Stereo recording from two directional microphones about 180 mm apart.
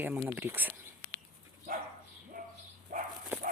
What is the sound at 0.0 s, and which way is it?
Speech, 10° right (ahead or behind).